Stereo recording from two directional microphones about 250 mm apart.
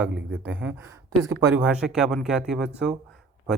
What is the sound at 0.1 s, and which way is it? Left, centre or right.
Speech, right.